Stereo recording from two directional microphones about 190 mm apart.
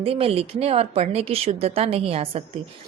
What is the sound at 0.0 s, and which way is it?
A woman's voice, 30° right (ahead or behind).